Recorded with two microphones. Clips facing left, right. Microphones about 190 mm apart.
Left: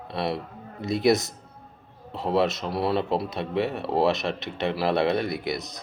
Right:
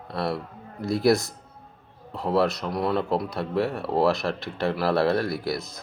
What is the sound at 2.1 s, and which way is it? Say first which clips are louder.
A man's voice: even; 25° left (ahead or behind).